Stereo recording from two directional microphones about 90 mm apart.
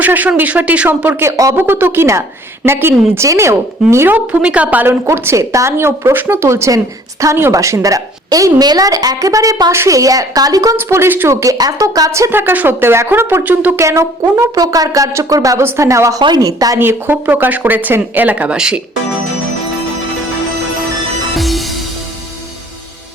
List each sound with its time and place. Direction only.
0.0 s speech: 20° right (ahead or behind)
1.3 s speech: 40° right (ahead or behind)
1.5 s a woman's voice: 25° right (ahead or behind)
4.9 s speech: 30° right (ahead or behind)
10.8 s speech: 30° right (ahead or behind)
11.5 s speech: 45° right (ahead or behind)
12.3 s speech: 25° right (ahead or behind)
13.7 s speech: 30° right (ahead or behind)
16.7 s speech: 25° right (ahead or behind)
21.3 s music: centre (ahead or behind)